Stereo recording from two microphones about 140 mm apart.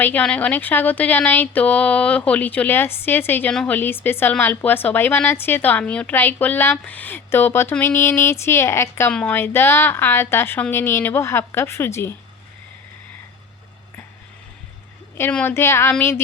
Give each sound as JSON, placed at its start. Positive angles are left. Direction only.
{"t": 0.0, "sound": "speech", "side_deg": 10}
{"t": 15.2, "sound": "speech", "side_deg": 10}